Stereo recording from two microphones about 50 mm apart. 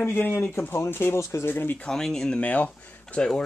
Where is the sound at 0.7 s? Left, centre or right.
Left.